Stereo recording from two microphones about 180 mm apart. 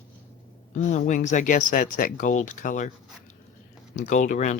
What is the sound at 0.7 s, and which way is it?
Speech, 40° left (ahead or behind).